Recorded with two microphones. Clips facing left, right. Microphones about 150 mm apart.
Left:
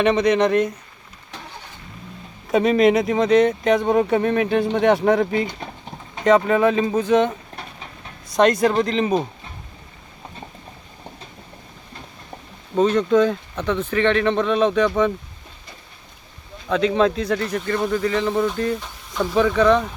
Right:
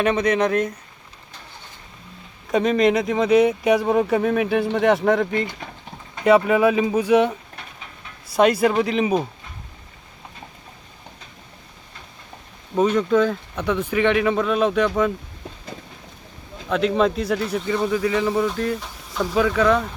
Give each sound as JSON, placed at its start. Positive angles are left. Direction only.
{"t": 0.0, "sound": "a man's voice", "side_deg": 0}
{"t": 2.5, "sound": "a man's voice", "side_deg": 0}
{"t": 7.5, "sound": "a sound", "side_deg": 35}
{"t": 8.3, "sound": "speech", "side_deg": -5}
{"t": 12.7, "sound": "speech", "side_deg": -5}
{"t": 16.6, "sound": "a man's voice", "side_deg": 0}